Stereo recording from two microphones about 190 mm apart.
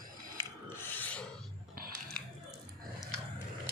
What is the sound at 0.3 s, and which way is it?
Filing, 10° left (ahead or behind).